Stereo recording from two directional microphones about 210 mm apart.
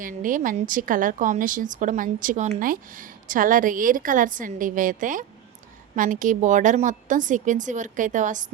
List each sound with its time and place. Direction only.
0.0 s a woman's voice: 40° right (ahead or behind)